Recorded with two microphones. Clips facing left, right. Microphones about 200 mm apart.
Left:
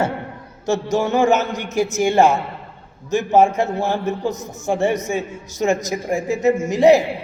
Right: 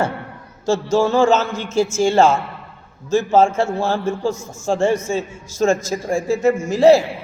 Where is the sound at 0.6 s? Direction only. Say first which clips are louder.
Right 2 dB; 20° left (ahead or behind).